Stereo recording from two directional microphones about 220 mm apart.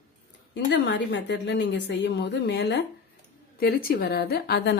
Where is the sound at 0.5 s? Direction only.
50° left (ahead or behind).